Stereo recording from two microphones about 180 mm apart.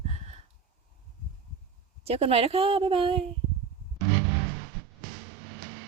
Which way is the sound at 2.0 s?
35° right (ahead or behind).